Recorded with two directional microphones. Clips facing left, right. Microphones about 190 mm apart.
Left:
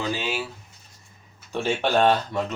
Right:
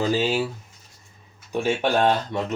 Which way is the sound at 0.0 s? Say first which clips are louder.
Right 6 dB; 40° right (ahead or behind).